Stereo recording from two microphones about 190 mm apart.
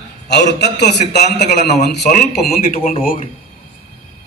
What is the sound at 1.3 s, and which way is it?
Speech, 50° left (ahead or behind).